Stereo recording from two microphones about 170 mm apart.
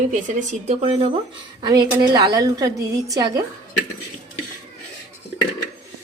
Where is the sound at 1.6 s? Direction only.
25° right (ahead or behind).